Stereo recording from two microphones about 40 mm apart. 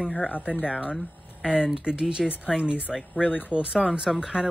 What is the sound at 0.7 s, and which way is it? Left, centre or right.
Speech, right.